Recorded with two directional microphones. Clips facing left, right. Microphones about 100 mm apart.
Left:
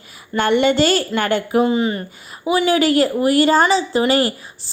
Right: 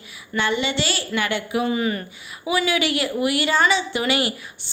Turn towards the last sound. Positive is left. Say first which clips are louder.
# left 6 dB
turn(degrees=35)  # may be behind; listen again after turning